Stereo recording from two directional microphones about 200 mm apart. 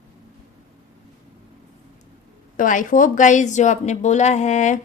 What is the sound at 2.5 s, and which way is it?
Speech, 40° left (ahead or behind).